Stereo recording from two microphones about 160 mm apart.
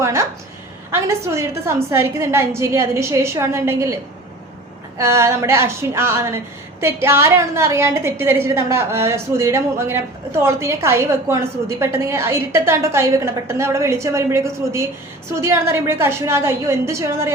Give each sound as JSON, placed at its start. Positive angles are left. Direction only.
{"t": 0.0, "sound": "a sound", "side_deg": -20}
{"t": 0.9, "sound": "a woman's voice", "side_deg": -15}
{"t": 4.9, "sound": "a woman's voice", "side_deg": -15}